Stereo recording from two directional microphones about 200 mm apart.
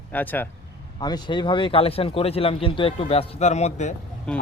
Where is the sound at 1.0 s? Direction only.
20° left (ahead or behind).